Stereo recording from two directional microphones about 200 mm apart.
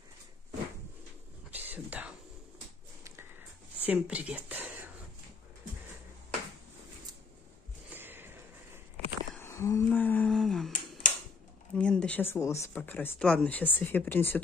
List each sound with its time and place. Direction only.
1.5 s whispering: 10° right (ahead or behind)
3.8 s speech: 5° right (ahead or behind)
7.9 s a sound: 10° right (ahead or behind)
9.3 s humming: 10° left (ahead or behind)
10.7 s finger snapping: 40° left (ahead or behind)
11.7 s speech: 5° left (ahead or behind)